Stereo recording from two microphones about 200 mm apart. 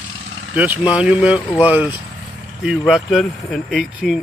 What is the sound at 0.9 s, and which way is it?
Speech, 5° right (ahead or behind).